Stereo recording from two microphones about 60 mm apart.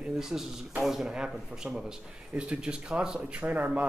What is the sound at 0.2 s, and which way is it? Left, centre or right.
Speech, centre.